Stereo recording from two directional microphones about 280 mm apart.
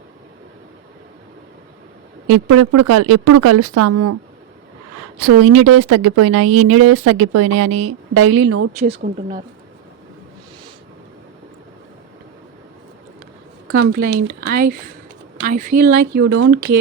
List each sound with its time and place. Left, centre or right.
2.2 s speech: right
5.4 s speech: right
8.8 s speech: right
13.7 s speech: right